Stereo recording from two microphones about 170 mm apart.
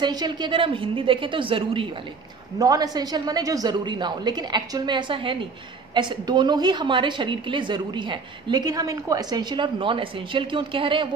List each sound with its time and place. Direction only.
0.0 s a woman's voice: 25° right (ahead or behind)